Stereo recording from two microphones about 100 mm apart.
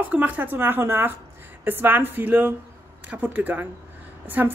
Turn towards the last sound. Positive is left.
turn(degrees=-20)  # may be behind; listen again after turning